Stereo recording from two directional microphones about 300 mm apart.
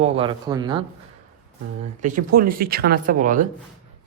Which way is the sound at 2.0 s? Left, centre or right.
Right.